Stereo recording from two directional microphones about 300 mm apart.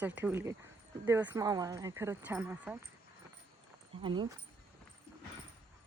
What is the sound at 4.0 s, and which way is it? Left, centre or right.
Speech, centre.